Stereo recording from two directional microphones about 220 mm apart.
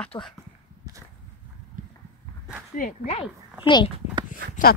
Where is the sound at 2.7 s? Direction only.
30° left (ahead or behind).